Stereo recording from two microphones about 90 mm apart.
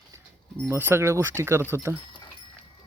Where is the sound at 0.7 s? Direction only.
25° right (ahead or behind).